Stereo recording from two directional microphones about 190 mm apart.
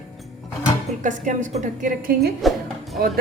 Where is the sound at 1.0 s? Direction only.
40° right (ahead or behind).